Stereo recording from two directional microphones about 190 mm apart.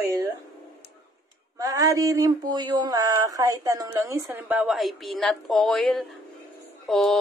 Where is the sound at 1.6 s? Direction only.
20° right (ahead or behind).